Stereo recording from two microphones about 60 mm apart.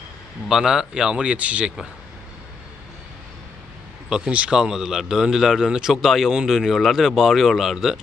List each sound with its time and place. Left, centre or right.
0.5 s a man's voice: centre
4.1 s a man's voice: centre